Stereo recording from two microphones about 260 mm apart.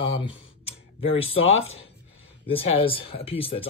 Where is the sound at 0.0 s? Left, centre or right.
Centre.